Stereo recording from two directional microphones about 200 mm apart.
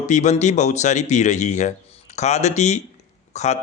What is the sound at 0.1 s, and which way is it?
Speech, 35° left (ahead or behind).